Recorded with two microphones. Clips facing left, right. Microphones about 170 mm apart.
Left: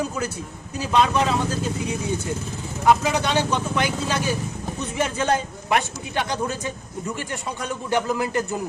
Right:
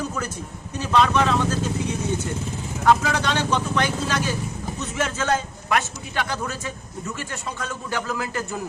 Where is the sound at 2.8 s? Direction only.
15° left (ahead or behind).